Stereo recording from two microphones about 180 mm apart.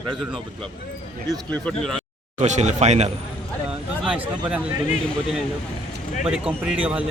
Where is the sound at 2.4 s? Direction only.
40° right (ahead or behind).